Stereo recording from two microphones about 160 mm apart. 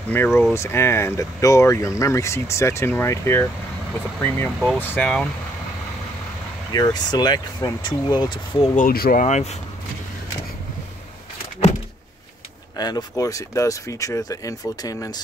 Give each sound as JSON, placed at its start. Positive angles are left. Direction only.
{"t": 0.1, "sound": "speech", "side_deg": 10}
{"t": 6.7, "sound": "speech", "side_deg": 25}
{"t": 8.7, "sound": "speech", "side_deg": 65}
{"t": 9.2, "sound": "speech", "side_deg": 45}
{"t": 12.7, "sound": "speech", "side_deg": 25}